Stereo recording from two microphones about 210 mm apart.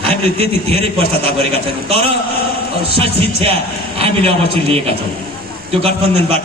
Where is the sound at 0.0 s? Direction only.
30° right (ahead or behind).